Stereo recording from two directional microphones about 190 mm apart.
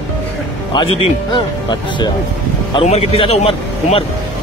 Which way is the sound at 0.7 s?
25° left (ahead or behind).